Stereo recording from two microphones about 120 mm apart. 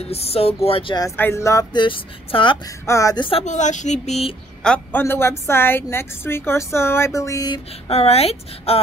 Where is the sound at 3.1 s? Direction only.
45° left (ahead or behind).